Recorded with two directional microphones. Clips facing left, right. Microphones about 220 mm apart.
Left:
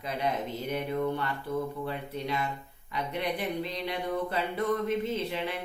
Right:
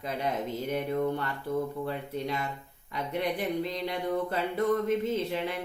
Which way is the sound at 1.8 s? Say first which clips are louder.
Right 1 dB; 45° right (ahead or behind).